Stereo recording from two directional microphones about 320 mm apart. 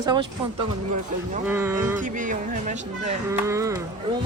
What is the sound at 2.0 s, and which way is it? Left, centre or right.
Speech, right.